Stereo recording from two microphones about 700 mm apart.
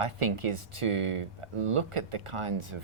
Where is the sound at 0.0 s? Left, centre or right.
Right.